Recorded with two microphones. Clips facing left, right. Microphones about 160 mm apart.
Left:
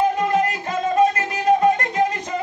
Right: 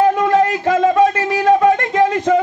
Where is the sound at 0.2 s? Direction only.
90° right.